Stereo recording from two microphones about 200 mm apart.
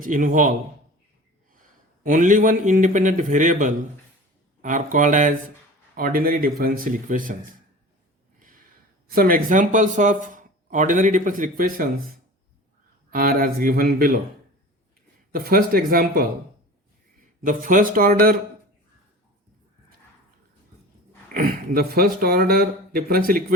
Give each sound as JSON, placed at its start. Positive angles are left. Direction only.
{"t": 0.0, "sound": "speech", "side_deg": -40}
{"t": 1.5, "sound": "a man's voice", "side_deg": -40}
{"t": 9.1, "sound": "speech", "side_deg": -45}
{"t": 13.1, "sound": "speech", "side_deg": -45}
{"t": 15.3, "sound": "speech", "side_deg": -45}
{"t": 17.4, "sound": "speech", "side_deg": -40}
{"t": 21.3, "sound": "a sound", "side_deg": -50}
{"t": 22.2, "sound": "speech", "side_deg": -50}